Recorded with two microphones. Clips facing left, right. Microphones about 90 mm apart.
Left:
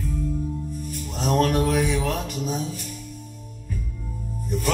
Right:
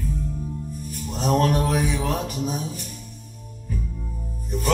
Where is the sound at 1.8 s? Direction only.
5° right (ahead or behind).